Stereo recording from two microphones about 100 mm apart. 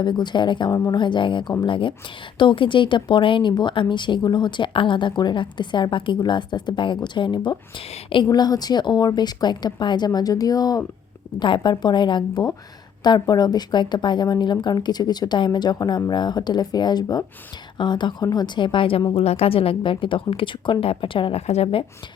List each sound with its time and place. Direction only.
0.0 s speech: 50° left (ahead or behind)
19.1 s speech: 90° left